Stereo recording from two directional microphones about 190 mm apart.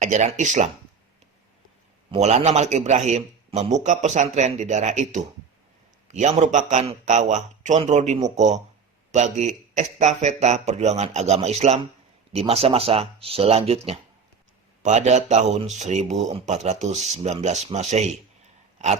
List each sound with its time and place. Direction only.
0.0 s speech: 40° right (ahead or behind)
2.0 s speech: 35° right (ahead or behind)